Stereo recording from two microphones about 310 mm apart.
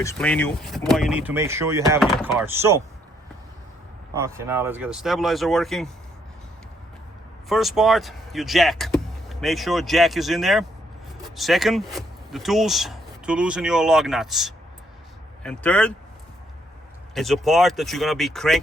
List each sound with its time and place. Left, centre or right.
0.0 s speech: centre
4.1 s speech: centre
7.4 s speech: centre
17.2 s speech: centre